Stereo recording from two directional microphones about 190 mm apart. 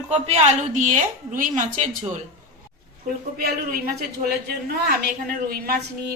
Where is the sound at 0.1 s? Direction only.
35° right (ahead or behind).